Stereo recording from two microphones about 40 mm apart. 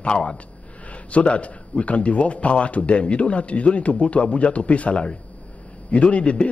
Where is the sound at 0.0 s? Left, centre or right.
Left.